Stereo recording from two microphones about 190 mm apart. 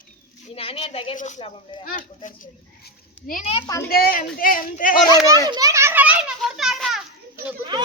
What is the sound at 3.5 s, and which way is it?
Speech, 25° left (ahead or behind).